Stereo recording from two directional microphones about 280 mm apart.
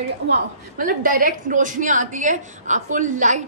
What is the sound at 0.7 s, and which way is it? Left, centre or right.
A woman's voice, right.